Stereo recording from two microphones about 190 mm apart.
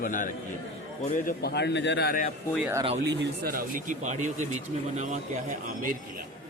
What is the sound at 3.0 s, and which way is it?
Speech, 65° right (ahead or behind).